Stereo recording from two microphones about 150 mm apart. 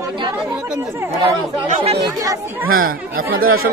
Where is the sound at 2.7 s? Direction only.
75° right (ahead or behind).